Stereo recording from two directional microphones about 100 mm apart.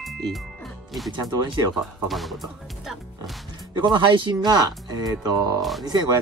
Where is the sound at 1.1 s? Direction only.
45° right (ahead or behind).